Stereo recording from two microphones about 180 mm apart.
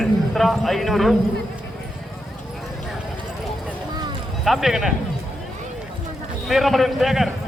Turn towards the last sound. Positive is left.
turn(degrees=0)  # may be behind; listen again after turning